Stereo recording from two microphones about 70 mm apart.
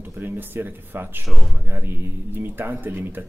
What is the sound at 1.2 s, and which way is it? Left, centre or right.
Speech, centre.